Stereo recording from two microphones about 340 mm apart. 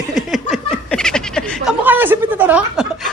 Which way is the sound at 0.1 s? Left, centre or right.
Centre.